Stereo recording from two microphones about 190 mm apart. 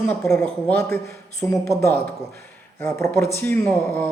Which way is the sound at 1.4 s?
15° left (ahead or behind).